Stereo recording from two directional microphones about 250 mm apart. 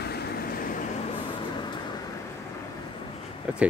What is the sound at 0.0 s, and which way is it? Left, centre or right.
Vehicle, left.